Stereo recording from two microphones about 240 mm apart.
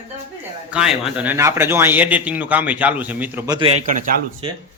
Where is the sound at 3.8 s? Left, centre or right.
Right.